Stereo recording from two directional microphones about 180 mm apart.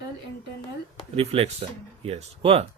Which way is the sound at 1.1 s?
35° right (ahead or behind).